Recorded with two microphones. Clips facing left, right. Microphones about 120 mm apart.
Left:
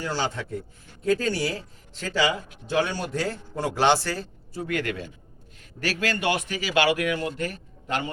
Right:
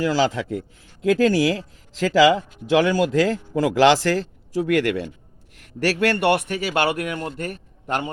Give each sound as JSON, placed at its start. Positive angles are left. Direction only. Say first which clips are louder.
{"t": 0.0, "sound": "a man's voice", "louder": "right 8 dB", "side_deg": -90}